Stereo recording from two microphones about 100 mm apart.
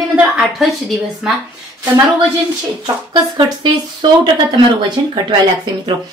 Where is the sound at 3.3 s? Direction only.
50° right (ahead or behind).